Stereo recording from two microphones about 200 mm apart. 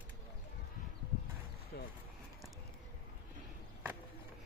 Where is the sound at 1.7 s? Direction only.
55° left (ahead or behind).